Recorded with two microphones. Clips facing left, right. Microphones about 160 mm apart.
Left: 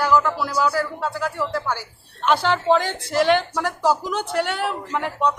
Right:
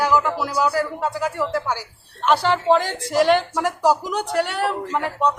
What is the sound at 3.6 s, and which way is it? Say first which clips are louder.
Speech: right 2 dB; 15° right (ahead or behind).